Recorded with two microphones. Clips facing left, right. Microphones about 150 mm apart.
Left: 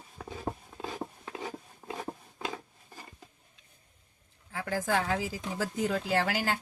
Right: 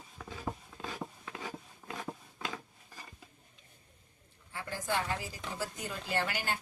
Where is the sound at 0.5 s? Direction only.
30° left (ahead or behind).